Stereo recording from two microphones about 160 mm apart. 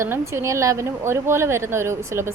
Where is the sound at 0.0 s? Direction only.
15° right (ahead or behind).